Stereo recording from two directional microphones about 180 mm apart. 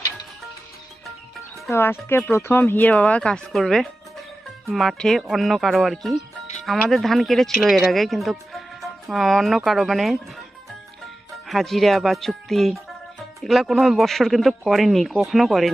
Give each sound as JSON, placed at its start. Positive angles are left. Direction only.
{"t": 1.7, "sound": "speech", "side_deg": 15}
{"t": 11.4, "sound": "speech", "side_deg": 0}